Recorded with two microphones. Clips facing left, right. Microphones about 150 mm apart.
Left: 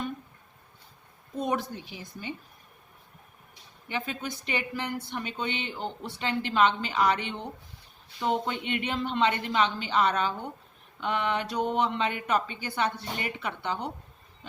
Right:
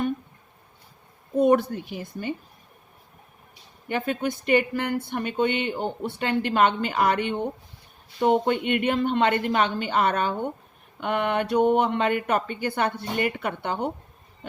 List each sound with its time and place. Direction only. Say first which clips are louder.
1.4 s speech: right 10 dB; 55° right (ahead or behind)
3.8 s speech: right 8 dB; 55° right (ahead or behind)